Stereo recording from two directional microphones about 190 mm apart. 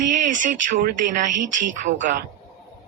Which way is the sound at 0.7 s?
45° right (ahead or behind).